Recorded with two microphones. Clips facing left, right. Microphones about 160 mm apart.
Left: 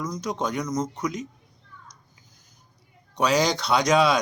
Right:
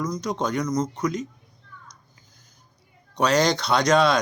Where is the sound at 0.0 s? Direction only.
5° left (ahead or behind).